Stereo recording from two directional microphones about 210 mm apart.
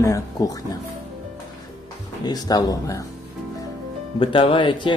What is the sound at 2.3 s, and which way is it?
Speech, 20° left (ahead or behind).